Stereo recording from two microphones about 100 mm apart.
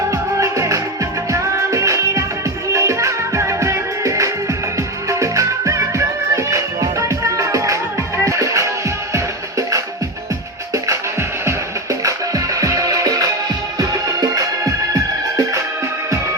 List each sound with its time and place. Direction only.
0.1 s music: 30° right (ahead or behind)
10.8 s music: 30° right (ahead or behind)